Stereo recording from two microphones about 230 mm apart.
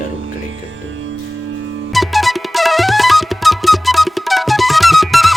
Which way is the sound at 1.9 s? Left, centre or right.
Centre.